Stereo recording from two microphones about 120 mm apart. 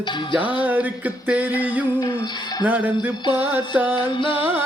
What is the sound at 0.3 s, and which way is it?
Music, 15° right (ahead or behind).